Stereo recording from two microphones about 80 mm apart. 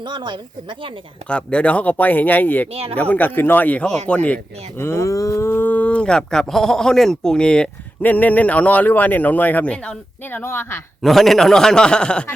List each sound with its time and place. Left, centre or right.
0.0 s speech: right
1.3 s speech: centre
4.8 s speech: left; by 7.7 s centre
8.0 s speech: left
10.3 s speech: left
11.0 s speech: centre